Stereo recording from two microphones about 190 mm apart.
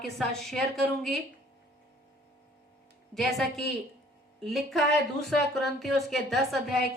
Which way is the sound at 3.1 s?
Centre (ahead or behind).